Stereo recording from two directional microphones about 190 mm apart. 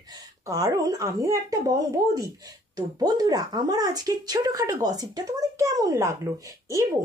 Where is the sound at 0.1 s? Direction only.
20° right (ahead or behind).